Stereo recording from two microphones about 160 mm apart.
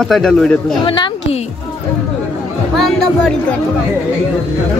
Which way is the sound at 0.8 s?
30° left (ahead or behind).